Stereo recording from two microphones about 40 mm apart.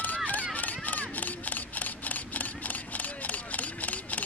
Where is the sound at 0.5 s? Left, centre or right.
Left.